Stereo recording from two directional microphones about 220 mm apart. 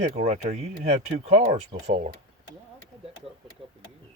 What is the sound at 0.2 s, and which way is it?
Speech, 30° right (ahead or behind).